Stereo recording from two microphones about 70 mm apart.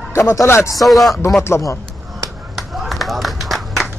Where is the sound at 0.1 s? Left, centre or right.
Left.